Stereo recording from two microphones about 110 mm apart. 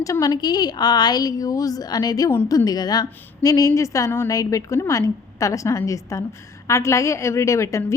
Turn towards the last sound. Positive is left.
turn(degrees=25)  # may be behind; listen again after turning